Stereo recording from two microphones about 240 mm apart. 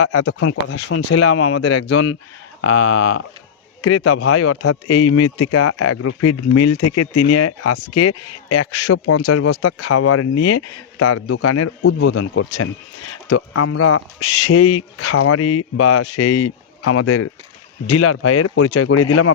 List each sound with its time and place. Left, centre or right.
0.0 s speech: left
2.6 s speech: left
3.8 s speech: left